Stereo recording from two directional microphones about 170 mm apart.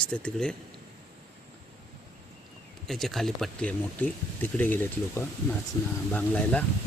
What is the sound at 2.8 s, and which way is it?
Speech, centre (ahead or behind).